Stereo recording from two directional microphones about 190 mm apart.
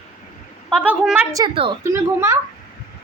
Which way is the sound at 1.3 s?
25° right (ahead or behind).